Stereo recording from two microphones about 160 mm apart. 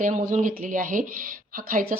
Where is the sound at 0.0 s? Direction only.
50° right (ahead or behind).